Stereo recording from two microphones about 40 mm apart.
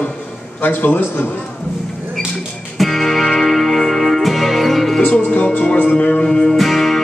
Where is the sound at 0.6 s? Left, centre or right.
Left.